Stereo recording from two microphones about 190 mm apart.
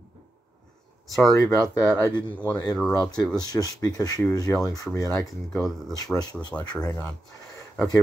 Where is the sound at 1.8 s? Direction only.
10° left (ahead or behind).